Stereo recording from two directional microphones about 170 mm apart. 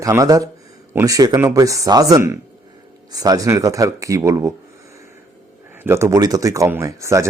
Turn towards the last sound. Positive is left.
turn(degrees=-15)  # may be behind; listen again after turning